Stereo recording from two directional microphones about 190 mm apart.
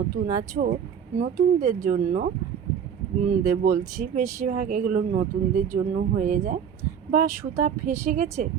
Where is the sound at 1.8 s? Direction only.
40° right (ahead or behind).